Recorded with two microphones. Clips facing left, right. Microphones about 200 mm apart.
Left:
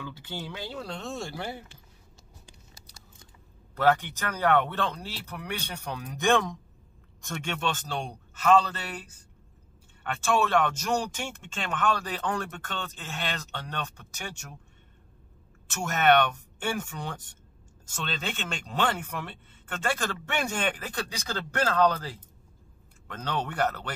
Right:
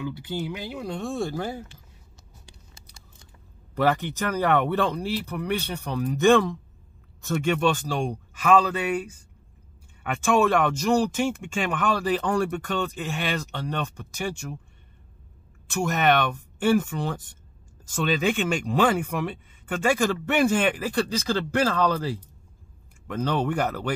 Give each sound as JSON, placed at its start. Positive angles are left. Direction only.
{"t": 0.0, "sound": "speech", "side_deg": -15}
{"t": 3.7, "sound": "speech", "side_deg": -10}
{"t": 15.7, "sound": "speech", "side_deg": -10}